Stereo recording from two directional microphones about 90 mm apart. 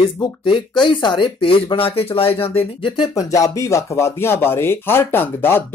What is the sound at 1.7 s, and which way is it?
Speech, 90° left.